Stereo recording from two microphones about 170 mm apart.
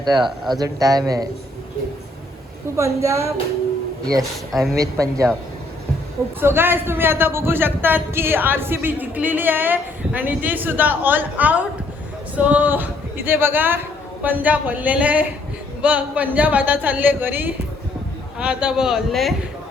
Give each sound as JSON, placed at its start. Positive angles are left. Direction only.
{"t": 0.0, "sound": "a man's voice", "side_deg": -25}
{"t": 2.7, "sound": "a man's voice", "side_deg": -15}
{"t": 4.2, "sound": "a man's voice", "side_deg": 0}
{"t": 4.8, "sound": "a man's voice", "side_deg": -20}
{"t": 6.4, "sound": "a man's voice", "side_deg": -15}